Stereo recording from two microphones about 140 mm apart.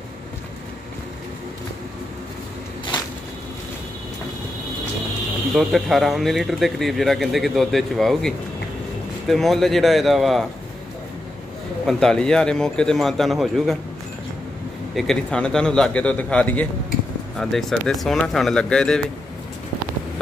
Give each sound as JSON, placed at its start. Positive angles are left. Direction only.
{"t": 2.9, "sound": "a sound", "side_deg": 35}
{"t": 5.5, "sound": "speech", "side_deg": 0}
{"t": 11.8, "sound": "speech", "side_deg": 5}
{"t": 15.0, "sound": "a man's voice", "side_deg": 5}